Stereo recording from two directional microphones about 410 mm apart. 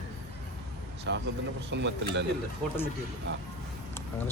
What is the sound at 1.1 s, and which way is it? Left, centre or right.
Speech, right.